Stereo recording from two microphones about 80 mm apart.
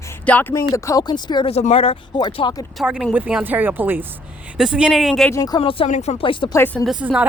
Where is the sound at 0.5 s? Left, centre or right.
Left.